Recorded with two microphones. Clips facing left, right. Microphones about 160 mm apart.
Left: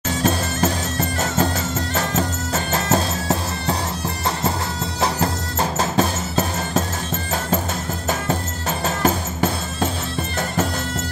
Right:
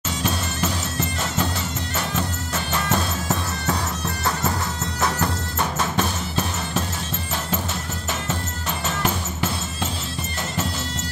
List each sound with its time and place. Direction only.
0.2 s music: 45° left (ahead or behind)
2.0 s music: 45° left (ahead or behind)
5.0 s music: 35° left (ahead or behind)
8.8 s music: 45° left (ahead or behind)